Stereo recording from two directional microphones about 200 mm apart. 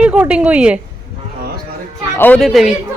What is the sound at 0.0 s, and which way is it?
Speech, 5° right (ahead or behind).